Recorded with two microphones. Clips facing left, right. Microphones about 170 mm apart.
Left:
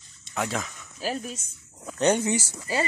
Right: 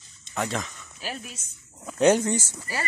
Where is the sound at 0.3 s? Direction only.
5° left (ahead or behind).